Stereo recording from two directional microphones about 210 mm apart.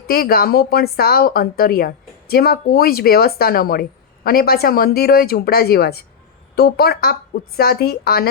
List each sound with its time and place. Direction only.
0.1 s speech: 45° left (ahead or behind)